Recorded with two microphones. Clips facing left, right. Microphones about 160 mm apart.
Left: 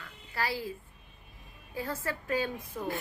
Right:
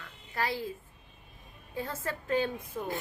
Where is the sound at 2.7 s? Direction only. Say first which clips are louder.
Left 1 dB; 5° right (ahead or behind).